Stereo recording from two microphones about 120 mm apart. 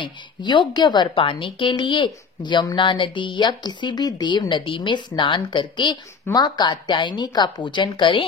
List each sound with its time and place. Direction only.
0.0 s a woman's voice: 40° left (ahead or behind)